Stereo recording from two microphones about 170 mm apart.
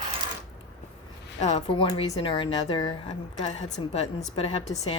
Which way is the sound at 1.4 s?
40° left (ahead or behind).